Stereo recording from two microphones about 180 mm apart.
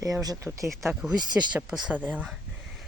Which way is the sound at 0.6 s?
Centre (ahead or behind).